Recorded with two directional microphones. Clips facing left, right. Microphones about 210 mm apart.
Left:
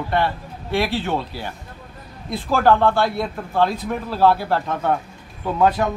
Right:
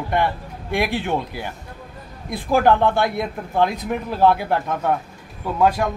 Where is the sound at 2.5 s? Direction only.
15° right (ahead or behind).